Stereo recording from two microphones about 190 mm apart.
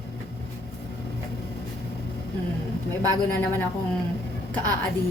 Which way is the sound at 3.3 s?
10° left (ahead or behind).